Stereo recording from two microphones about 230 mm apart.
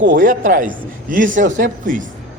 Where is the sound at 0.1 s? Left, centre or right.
Right.